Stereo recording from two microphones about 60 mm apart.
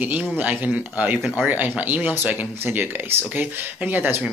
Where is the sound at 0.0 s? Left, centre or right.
Right.